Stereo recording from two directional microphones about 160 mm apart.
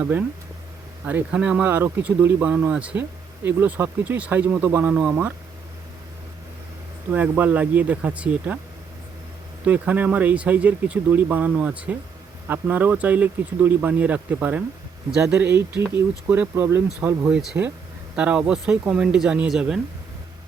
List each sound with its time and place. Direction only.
0.0 s speech: 10° right (ahead or behind)
7.1 s speech: 10° right (ahead or behind)
9.6 s speech: 10° right (ahead or behind)
17.3 s speech: 5° right (ahead or behind)